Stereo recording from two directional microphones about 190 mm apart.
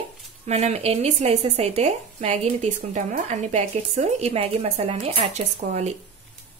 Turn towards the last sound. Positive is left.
turn(degrees=-35)  # may be behind; listen again after turning